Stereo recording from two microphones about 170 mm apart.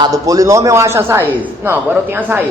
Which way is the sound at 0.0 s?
20° right (ahead or behind).